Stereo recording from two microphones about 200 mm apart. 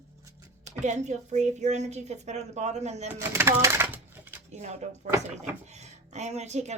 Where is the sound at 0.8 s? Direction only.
35° right (ahead or behind).